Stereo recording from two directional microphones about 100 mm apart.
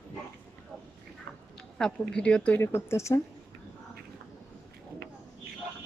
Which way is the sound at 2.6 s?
25° left (ahead or behind).